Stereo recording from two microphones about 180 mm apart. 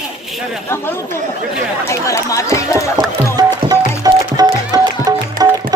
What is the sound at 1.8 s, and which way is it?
Chatter, 15° left (ahead or behind).